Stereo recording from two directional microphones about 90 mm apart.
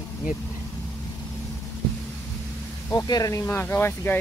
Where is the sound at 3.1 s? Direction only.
40° left (ahead or behind); by 4.2 s 25° left (ahead or behind).